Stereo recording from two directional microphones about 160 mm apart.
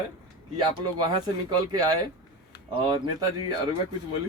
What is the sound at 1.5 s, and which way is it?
Speech, 25° right (ahead or behind).